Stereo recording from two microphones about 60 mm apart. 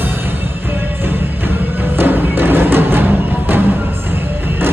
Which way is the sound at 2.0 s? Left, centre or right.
Right.